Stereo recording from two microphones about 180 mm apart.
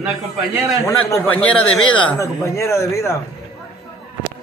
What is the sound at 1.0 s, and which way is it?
Speech, 10° left (ahead or behind).